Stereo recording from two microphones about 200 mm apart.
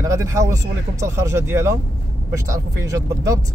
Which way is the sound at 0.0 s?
15° right (ahead or behind).